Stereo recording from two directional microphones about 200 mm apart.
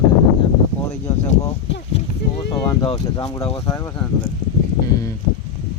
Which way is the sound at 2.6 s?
20° left (ahead or behind).